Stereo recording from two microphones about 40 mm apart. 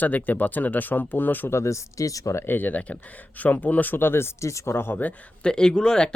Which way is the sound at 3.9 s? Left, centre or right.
Left.